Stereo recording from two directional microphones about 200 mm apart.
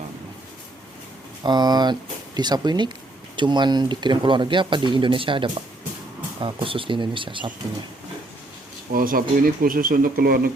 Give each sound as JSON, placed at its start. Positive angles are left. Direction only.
{"t": 1.5, "sound": "speech", "side_deg": -20}
{"t": 8.9, "sound": "speech", "side_deg": -45}